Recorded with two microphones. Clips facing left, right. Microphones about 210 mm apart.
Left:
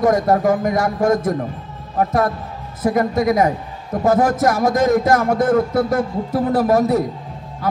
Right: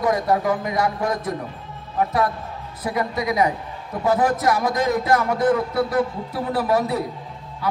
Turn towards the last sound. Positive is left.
turn(degrees=45)  # may be behind; listen again after turning